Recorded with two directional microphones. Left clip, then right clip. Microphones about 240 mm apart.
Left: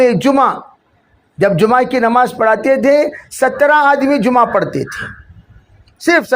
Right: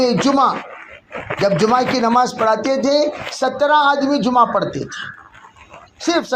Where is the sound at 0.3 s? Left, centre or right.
Left.